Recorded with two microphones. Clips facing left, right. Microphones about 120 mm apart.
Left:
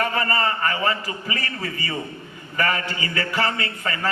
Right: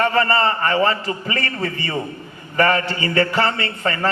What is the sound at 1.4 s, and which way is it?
A man's voice, 40° right (ahead or behind).